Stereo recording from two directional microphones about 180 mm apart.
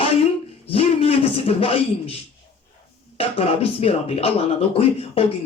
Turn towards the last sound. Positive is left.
turn(degrees=35)  # may be behind; listen again after turning